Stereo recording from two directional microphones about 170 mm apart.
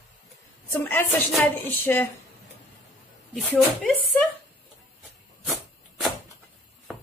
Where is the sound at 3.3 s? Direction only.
Centre (ahead or behind).